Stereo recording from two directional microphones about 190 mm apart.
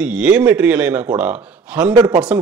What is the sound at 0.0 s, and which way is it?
A man's voice, 5° right (ahead or behind).